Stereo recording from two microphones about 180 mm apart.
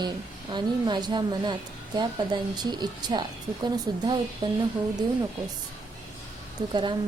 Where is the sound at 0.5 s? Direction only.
25° right (ahead or behind).